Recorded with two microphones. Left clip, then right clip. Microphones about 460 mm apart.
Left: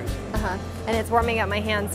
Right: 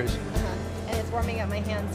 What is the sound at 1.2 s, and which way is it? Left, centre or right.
Speech, left.